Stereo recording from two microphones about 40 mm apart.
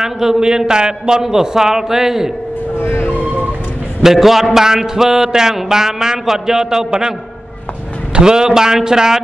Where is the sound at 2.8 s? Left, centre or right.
Left.